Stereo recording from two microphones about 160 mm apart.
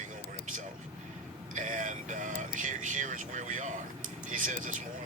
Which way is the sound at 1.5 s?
55° right (ahead or behind).